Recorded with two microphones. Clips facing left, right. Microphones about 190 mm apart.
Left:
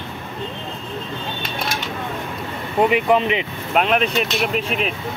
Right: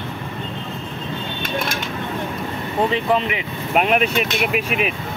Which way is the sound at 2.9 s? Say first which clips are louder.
Left 3 dB; 15° left (ahead or behind).